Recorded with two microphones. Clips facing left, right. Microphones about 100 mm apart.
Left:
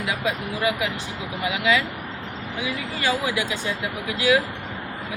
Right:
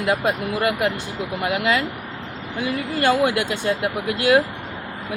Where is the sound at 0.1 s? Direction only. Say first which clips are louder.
Right 6 dB; 55° right (ahead or behind).